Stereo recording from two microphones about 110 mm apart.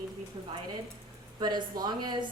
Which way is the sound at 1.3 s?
40° right (ahead or behind).